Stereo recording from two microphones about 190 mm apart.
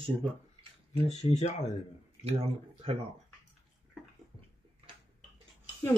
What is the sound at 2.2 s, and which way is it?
Speech, 30° right (ahead or behind).